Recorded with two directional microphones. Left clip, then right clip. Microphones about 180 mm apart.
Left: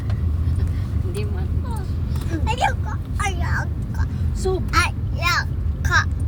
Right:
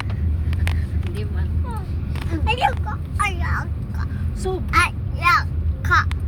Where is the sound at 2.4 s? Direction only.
25° right (ahead or behind).